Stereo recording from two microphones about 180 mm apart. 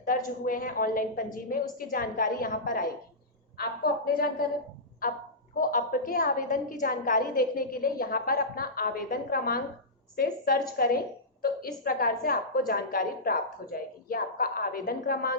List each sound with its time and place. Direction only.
0.0 s a woman's voice: 50° left (ahead or behind)